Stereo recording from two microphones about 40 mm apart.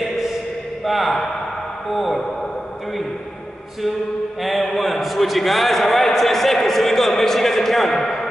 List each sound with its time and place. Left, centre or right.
0.8 s speech: centre
4.4 s a man's voice: centre